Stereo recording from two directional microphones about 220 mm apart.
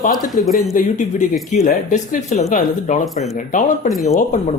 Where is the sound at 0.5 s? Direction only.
35° left (ahead or behind).